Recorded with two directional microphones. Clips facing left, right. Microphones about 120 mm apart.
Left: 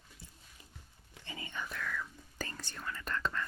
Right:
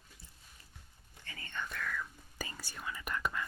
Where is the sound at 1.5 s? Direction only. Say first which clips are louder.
Right 1 dB; 5° left (ahead or behind).